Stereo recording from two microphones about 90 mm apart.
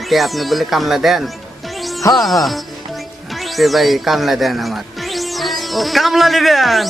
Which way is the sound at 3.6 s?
Centre (ahead or behind).